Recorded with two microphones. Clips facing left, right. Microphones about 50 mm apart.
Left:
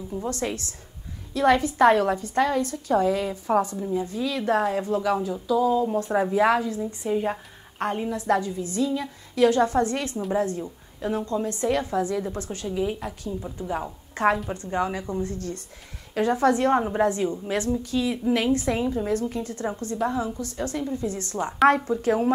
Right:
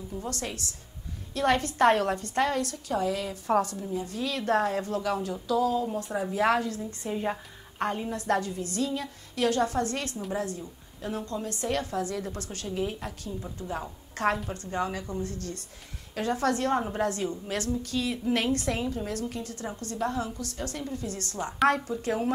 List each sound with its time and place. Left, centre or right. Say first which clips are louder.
0.1 s a woman's voice: left 7 dB; left
1.3 s a woman's voice: left 5 dB; centre
2.9 s a woman's voice: left 7 dB; left
3.3 s a woman's voice: left 3 dB; centre
5.9 s a woman's voice: left 8 dB; left
6.2 s a woman's voice: left 2 dB; centre